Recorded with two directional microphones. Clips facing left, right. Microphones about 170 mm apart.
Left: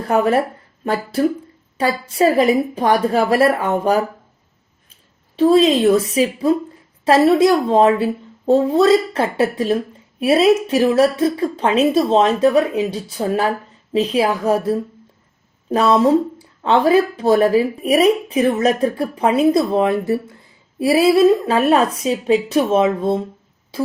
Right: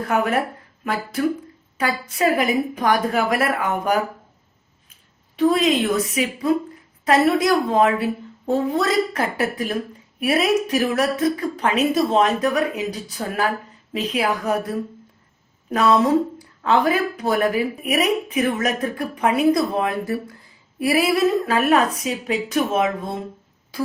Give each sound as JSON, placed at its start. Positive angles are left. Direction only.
{"t": 0.1, "sound": "a woman's voice", "side_deg": 30}
{"t": 1.8, "sound": "a woman's voice", "side_deg": 30}
{"t": 5.4, "sound": "a woman's voice", "side_deg": 30}